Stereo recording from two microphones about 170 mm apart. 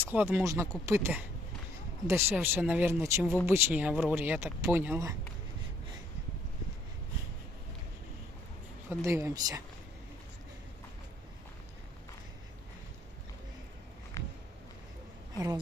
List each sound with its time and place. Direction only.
0.0 s speech: 10° right (ahead or behind)
8.9 s speech: 15° right (ahead or behind)
14.2 s a sound: 15° left (ahead or behind)